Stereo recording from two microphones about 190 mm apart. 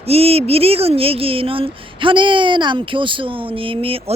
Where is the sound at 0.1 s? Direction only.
30° right (ahead or behind).